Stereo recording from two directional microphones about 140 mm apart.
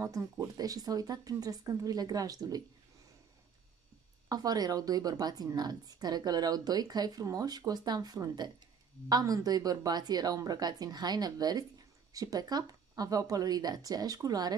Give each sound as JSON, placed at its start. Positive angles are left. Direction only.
{"t": 0.0, "sound": "a woman's voice", "side_deg": -25}
{"t": 4.3, "sound": "a woman's voice", "side_deg": -30}